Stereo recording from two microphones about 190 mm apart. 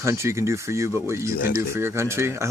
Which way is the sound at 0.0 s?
15° right (ahead or behind).